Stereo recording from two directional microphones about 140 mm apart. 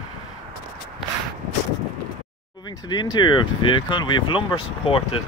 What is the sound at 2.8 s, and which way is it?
Speech, 30° left (ahead or behind).